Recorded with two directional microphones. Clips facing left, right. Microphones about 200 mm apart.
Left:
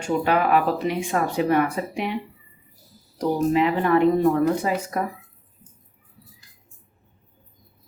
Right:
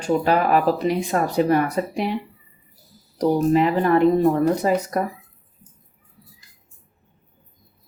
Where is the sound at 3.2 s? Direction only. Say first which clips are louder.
Right 3 dB; 40° right (ahead or behind).